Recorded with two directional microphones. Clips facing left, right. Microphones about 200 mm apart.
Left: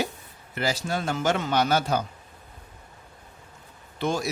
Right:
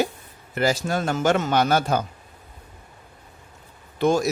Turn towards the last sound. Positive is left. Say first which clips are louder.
# right 7 dB
turn(degrees=-45)  # may be behind; listen again after turning